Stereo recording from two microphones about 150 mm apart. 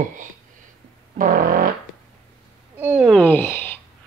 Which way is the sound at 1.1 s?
65° right (ahead or behind).